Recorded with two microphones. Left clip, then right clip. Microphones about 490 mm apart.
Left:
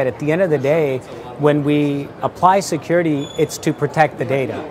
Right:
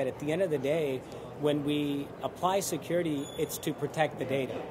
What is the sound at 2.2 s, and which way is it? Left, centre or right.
Speech, left.